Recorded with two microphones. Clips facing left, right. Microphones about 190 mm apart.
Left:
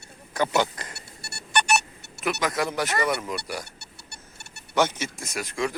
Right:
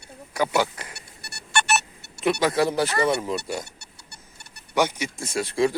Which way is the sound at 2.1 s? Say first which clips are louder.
Right 5 dB; 30° right (ahead or behind).